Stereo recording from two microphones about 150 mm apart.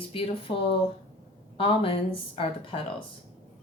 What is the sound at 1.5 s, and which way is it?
Speech, 40° left (ahead or behind).